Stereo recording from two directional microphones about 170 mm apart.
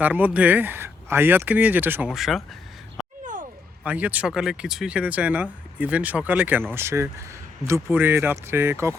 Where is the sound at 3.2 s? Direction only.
50° right (ahead or behind).